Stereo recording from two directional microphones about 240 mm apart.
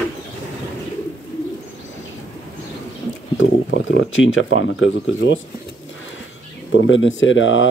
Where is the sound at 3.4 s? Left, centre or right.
Left.